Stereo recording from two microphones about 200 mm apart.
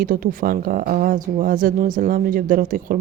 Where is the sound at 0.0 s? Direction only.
45° right (ahead or behind).